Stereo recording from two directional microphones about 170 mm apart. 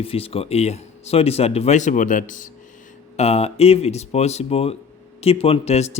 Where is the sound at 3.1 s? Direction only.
35° left (ahead or behind).